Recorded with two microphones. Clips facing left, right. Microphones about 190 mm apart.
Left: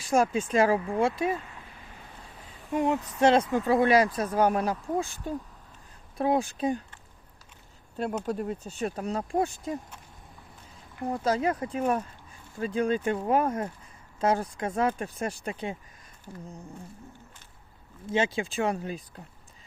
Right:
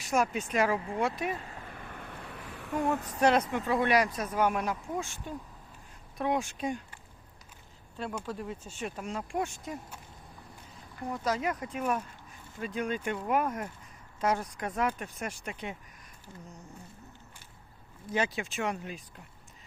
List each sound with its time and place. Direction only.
0.0 s speech: 30° left (ahead or behind)
1.6 s a sound: 60° right (ahead or behind)
2.7 s speech: 20° left (ahead or behind)
7.9 s speech: 45° left (ahead or behind)
11.1 s speech: 30° left (ahead or behind)
18.0 s speech: 25° left (ahead or behind)